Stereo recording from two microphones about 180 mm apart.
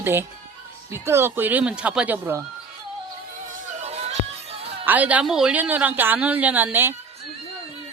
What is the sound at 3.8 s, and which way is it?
Music, 35° right (ahead or behind).